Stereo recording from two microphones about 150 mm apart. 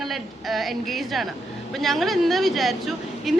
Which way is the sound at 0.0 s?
Centre (ahead or behind).